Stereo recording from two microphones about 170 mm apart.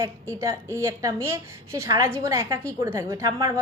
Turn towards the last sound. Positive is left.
turn(degrees=-20)  # may be behind; listen again after turning